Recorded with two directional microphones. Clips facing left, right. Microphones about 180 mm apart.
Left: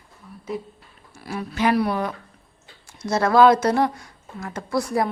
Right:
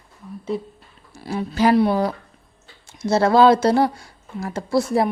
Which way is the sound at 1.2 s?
30° right (ahead or behind).